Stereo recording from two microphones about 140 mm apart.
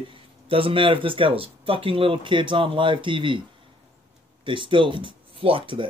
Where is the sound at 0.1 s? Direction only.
40° right (ahead or behind).